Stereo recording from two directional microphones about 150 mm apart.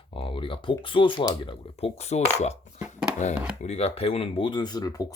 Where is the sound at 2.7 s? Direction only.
10° right (ahead or behind).